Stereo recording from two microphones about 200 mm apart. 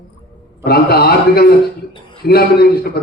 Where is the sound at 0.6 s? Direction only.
50° left (ahead or behind).